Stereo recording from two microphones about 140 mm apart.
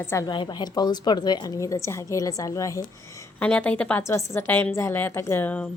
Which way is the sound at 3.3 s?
10° left (ahead or behind).